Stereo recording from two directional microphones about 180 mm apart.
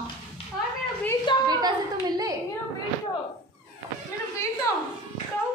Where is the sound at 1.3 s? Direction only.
25° left (ahead or behind).